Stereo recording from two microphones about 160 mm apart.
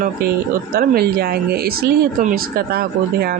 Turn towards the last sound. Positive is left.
turn(degrees=-70)  # may be behind; listen again after turning